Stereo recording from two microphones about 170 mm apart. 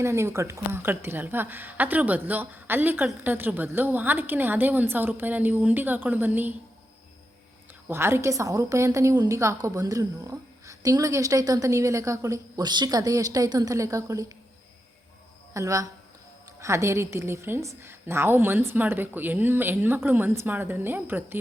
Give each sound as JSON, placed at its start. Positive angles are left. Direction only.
{"t": 0.0, "sound": "a woman's voice", "side_deg": -15}
{"t": 7.9, "sound": "a woman's voice", "side_deg": -15}
{"t": 15.5, "sound": "a woman's voice", "side_deg": -20}